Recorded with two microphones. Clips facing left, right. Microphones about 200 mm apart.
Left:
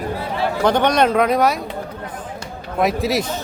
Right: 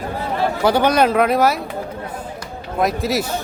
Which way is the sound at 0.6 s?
5° right (ahead or behind).